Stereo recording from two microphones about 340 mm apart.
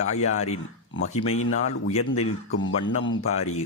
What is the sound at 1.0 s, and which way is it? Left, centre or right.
Speech, left.